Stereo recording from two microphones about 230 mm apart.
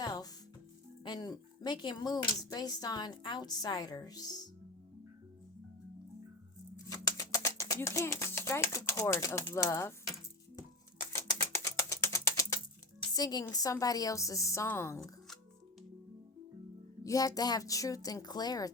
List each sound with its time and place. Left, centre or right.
0.0 s music: centre
1.0 s speech: centre
6.7 s speech: centre
11.5 s a sound: centre
13.1 s speech: centre
17.0 s speech: centre